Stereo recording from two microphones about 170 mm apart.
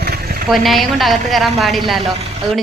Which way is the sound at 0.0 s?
65° right (ahead or behind).